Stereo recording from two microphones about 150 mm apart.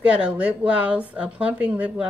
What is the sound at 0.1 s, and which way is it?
A woman's voice, 10° right (ahead or behind).